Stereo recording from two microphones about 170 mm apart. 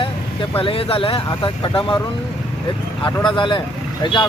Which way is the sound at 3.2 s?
30° left (ahead or behind).